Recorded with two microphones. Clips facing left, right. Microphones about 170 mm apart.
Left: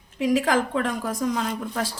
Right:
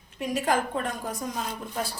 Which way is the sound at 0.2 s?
90° left.